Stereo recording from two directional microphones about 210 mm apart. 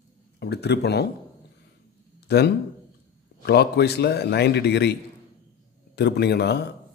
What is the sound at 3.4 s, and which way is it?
Speech, 50° left (ahead or behind).